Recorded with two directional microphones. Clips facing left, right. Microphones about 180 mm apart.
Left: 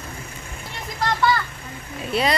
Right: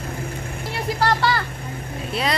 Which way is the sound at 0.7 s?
70° right (ahead or behind).